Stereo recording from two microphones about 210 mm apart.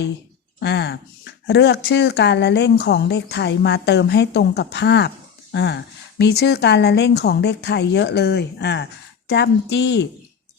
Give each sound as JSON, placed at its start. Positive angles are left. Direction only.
{"t": 0.6, "sound": "speech", "side_deg": 55}